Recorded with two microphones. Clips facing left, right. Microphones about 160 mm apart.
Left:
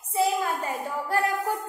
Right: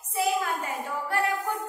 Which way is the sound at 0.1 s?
35° left (ahead or behind).